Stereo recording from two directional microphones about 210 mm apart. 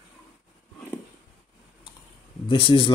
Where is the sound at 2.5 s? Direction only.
25° left (ahead or behind).